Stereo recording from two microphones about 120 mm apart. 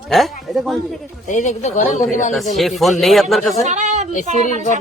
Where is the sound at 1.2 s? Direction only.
90° left.